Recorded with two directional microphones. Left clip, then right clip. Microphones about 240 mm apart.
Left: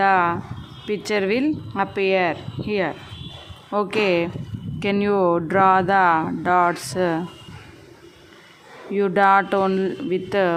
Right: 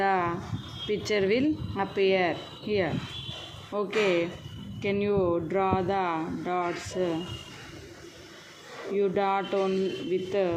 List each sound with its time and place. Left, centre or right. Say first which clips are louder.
0.0 s a sound: left 9 dB; centre
0.9 s a woman's voice: left 4 dB; centre
9.0 s speech: left 10 dB; left